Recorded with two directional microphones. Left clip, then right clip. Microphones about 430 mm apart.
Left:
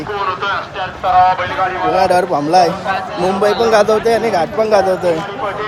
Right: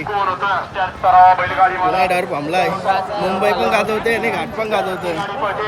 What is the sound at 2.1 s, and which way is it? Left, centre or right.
Speech, centre.